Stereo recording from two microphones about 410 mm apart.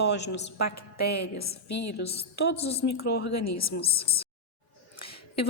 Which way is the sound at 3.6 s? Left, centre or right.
Centre.